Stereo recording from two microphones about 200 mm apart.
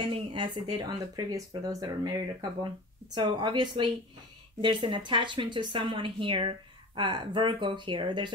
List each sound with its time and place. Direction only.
0.0 s speech: 25° right (ahead or behind)
3.2 s speech: 20° right (ahead or behind)